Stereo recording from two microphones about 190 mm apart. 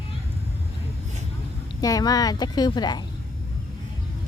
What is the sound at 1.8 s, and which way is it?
Speech, 20° left (ahead or behind).